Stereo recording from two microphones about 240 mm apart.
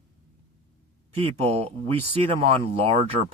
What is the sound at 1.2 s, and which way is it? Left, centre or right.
A man's voice, right.